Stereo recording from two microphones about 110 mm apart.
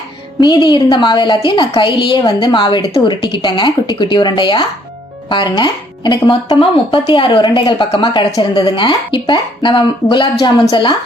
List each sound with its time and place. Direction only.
0.3 s a woman's voice: 45° left (ahead or behind)